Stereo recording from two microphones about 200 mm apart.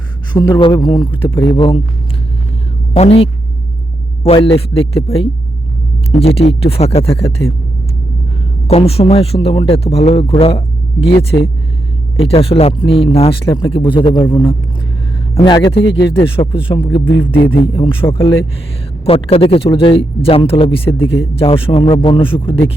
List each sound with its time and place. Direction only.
0.3 s speech: 20° left (ahead or behind)
2.9 s speech: 30° left (ahead or behind)
8.6 s speech: 30° left (ahead or behind)